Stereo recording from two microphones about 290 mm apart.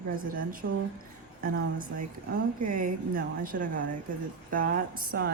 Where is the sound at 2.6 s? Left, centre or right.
Right.